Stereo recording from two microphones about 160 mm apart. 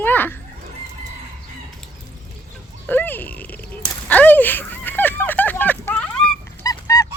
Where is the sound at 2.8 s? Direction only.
10° left (ahead or behind).